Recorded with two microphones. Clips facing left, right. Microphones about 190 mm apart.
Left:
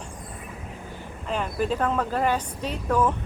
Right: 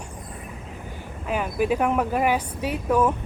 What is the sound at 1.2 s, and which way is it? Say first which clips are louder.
A woman's voice: right 3 dB; 10° right (ahead or behind).